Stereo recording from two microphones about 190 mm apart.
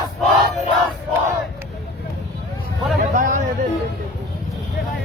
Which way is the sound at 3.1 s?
40° right (ahead or behind).